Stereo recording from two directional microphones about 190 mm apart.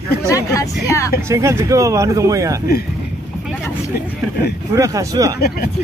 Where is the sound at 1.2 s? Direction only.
15° right (ahead or behind).